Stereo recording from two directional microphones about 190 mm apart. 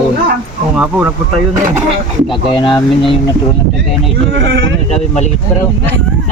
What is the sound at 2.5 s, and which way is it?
Speech, 25° left (ahead or behind).